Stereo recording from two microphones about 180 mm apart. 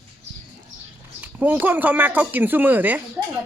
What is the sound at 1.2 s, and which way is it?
Speech, 10° right (ahead or behind).